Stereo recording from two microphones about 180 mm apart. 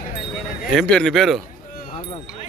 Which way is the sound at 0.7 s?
5° left (ahead or behind).